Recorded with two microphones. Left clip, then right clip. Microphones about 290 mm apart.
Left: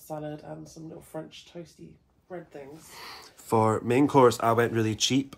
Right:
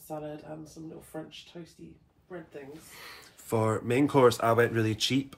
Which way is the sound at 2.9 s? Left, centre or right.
Centre.